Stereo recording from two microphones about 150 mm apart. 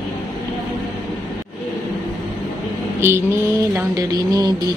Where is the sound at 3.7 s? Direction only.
25° right (ahead or behind).